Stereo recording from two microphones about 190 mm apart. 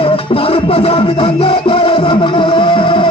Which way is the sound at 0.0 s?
30° left (ahead or behind).